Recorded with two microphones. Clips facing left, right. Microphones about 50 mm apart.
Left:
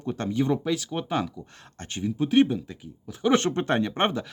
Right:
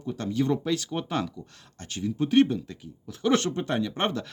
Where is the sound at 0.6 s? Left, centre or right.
Centre.